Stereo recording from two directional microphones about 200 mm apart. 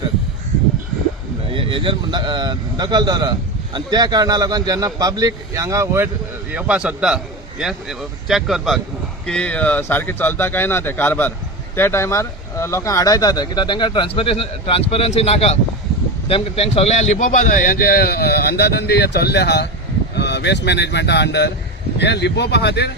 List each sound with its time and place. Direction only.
1.5 s a man's voice: 25° right (ahead or behind); by 22.9 s 55° left (ahead or behind)